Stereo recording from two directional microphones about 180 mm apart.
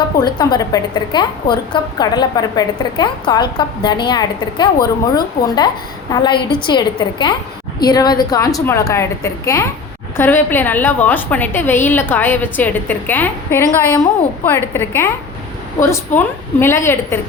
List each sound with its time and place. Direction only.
0.2 s a woman's voice: 25° left (ahead or behind)